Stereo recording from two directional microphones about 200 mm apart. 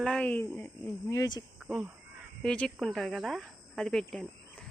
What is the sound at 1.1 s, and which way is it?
Speech, 20° left (ahead or behind).